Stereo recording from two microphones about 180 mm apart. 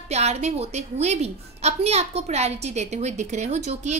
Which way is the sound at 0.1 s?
35° right (ahead or behind).